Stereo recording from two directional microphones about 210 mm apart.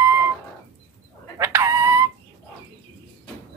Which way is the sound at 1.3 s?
15° right (ahead or behind).